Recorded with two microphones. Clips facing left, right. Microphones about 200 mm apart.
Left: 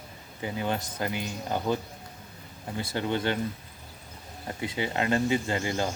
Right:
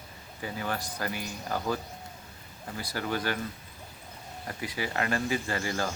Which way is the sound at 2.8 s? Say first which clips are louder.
Left 3 dB; 25° left (ahead or behind).